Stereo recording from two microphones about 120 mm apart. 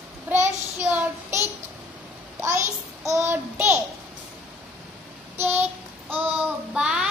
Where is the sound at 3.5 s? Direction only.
15° right (ahead or behind).